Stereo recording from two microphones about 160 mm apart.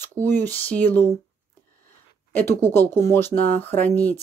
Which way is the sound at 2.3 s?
15° left (ahead or behind).